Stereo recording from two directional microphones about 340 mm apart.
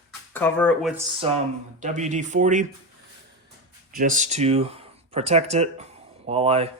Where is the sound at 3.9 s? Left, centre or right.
Right.